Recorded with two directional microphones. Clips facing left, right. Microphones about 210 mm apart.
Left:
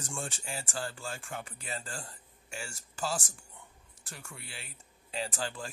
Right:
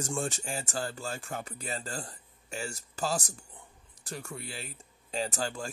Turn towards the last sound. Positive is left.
turn(degrees=-45)  # may be behind; listen again after turning